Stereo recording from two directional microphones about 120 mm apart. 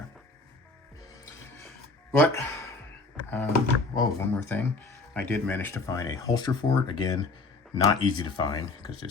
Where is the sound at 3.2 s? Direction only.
25° left (ahead or behind).